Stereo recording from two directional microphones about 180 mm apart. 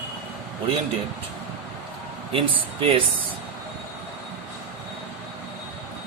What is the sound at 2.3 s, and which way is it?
Speech, 30° right (ahead or behind).